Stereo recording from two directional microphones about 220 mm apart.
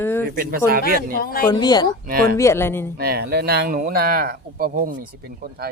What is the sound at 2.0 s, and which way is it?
Speech, 40° right (ahead or behind).